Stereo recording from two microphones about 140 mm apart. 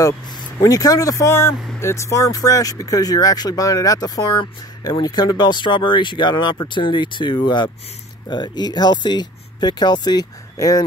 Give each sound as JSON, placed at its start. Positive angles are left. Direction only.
{"t": 0.0, "sound": "speech", "side_deg": 25}